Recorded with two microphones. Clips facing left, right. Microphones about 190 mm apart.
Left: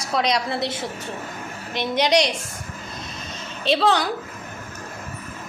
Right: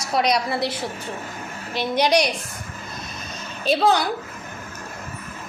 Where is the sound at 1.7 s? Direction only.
20° left (ahead or behind).